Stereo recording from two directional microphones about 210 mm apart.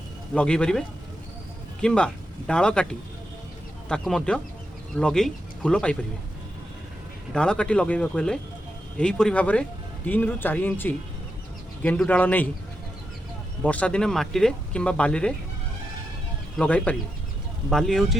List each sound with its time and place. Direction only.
0.3 s speech: 5° left (ahead or behind)
7.3 s speech: 5° left (ahead or behind)
13.6 s speech: 5° left (ahead or behind)
16.6 s speech: 5° left (ahead or behind)